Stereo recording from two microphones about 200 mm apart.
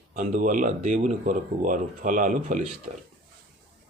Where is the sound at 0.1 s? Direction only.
40° right (ahead or behind).